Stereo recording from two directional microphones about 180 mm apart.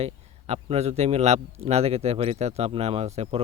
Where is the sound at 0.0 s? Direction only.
35° right (ahead or behind).